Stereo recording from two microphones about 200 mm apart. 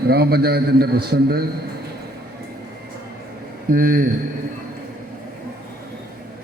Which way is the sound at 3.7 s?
45° right (ahead or behind).